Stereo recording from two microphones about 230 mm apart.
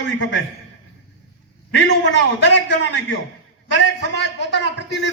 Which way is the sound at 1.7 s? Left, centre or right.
Left.